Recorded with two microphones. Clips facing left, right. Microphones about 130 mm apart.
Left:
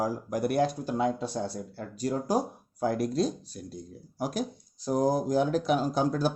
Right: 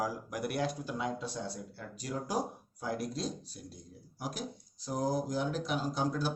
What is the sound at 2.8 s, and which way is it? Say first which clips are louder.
Speech: left 9 dB; 55° left (ahead or behind).